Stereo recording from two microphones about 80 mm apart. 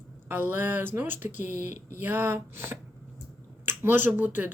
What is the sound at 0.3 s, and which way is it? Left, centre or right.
Speech, right.